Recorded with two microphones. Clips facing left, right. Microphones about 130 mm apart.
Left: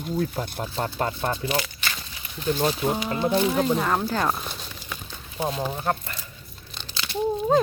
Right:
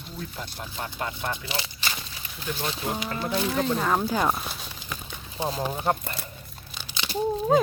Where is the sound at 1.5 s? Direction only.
25° right (ahead or behind).